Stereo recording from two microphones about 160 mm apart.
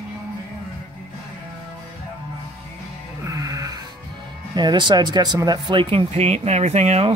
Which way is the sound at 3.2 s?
20° right (ahead or behind).